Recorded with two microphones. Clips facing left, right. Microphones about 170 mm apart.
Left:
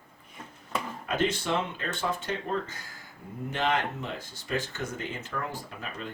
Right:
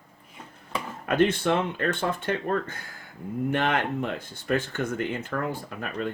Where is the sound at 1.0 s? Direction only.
55° right (ahead or behind).